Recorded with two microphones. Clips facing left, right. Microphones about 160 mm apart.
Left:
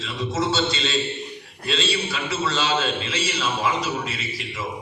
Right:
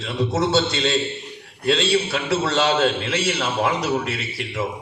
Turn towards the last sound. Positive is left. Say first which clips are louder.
# right 5 dB
turn(degrees=-65)  # may be behind; listen again after turning